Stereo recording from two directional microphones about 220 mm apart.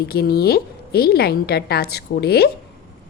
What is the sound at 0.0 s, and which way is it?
A woman's voice, 45° left (ahead or behind).